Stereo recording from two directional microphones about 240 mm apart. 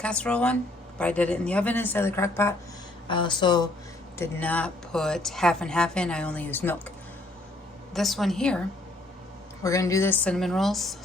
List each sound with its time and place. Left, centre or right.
0.0 s a woman's voice: centre
4.2 s a woman's voice: centre
7.9 s a woman's voice: centre
9.6 s a woman's voice: centre